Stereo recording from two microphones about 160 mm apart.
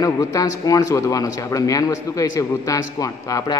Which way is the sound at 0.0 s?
20° left (ahead or behind).